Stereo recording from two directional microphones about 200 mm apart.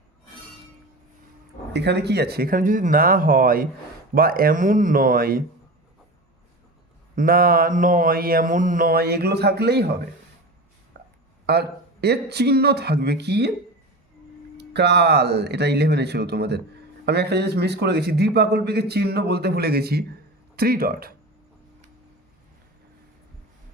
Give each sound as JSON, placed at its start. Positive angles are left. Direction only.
{"t": 1.7, "sound": "speech", "side_deg": -55}
{"t": 7.2, "sound": "speech", "side_deg": -45}
{"t": 10.9, "sound": "a sound", "side_deg": -55}
{"t": 11.4, "sound": "a man's voice", "side_deg": -55}
{"t": 14.6, "sound": "a man's voice", "side_deg": -55}